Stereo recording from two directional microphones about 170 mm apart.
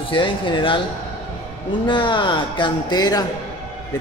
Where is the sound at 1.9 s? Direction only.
30° left (ahead or behind).